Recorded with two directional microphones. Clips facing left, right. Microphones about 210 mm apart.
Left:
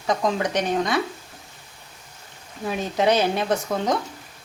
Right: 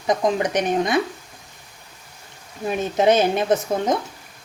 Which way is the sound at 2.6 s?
20° right (ahead or behind).